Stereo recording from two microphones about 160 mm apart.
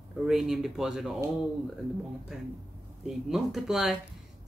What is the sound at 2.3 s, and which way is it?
Speech, 5° right (ahead or behind).